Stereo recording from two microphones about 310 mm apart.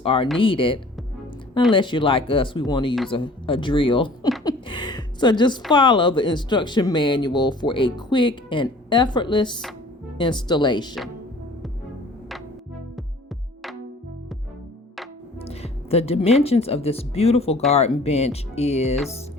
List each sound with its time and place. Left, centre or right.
0.0 s speech: centre
4.4 s a sound: centre
5.7 s speech: centre
15.4 s music: centre
16.4 s speech: centre